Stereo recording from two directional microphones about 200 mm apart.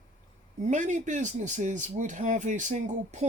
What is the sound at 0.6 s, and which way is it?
Speech, 40° right (ahead or behind).